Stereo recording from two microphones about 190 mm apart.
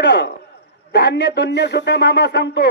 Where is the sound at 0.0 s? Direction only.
65° left (ahead or behind).